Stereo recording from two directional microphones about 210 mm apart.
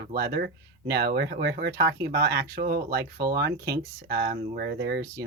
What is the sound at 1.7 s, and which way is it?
Speech, 15° right (ahead or behind).